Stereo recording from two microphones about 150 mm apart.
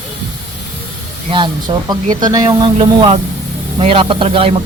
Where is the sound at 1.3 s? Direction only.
30° right (ahead or behind).